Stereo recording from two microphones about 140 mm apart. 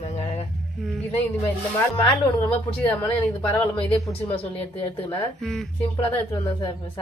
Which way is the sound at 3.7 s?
40° left (ahead or behind).